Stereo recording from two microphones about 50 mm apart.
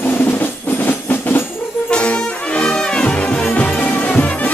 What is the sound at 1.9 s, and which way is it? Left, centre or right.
Brass instrument, left.